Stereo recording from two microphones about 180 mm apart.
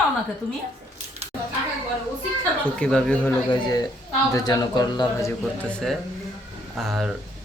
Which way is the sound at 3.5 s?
20° left (ahead or behind).